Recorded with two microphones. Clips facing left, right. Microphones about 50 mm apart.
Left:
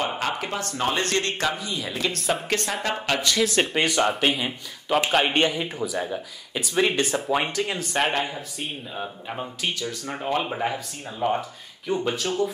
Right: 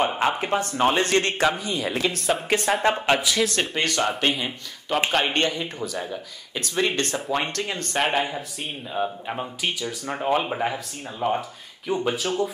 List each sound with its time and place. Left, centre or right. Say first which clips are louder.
0.2 s speech: right 5 dB; right; by 2.8 s centre
2.8 s speech: right 5 dB; right
3.2 s speech: left 1 dB; centre